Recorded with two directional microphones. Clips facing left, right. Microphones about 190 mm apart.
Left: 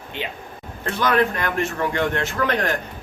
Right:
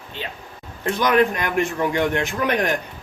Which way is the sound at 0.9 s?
15° right (ahead or behind).